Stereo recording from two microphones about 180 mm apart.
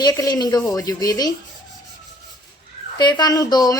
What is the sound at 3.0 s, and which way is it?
Speech, 25° left (ahead or behind).